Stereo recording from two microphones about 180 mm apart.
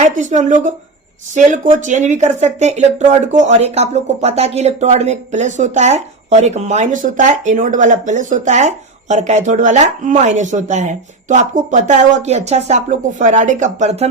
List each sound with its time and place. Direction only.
0.0 s a woman's voice: 40° right (ahead or behind)